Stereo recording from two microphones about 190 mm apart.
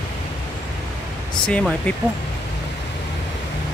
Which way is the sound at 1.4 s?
5° left (ahead or behind).